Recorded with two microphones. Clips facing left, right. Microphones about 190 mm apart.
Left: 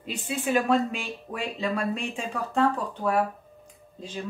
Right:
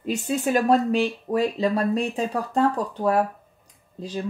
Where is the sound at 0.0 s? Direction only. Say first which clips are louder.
Right 6 dB; 40° right (ahead or behind).